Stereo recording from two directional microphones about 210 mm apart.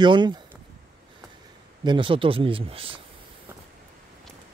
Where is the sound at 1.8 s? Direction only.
25° right (ahead or behind).